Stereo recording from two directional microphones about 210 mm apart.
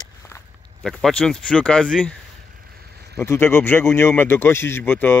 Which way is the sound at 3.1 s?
10° left (ahead or behind).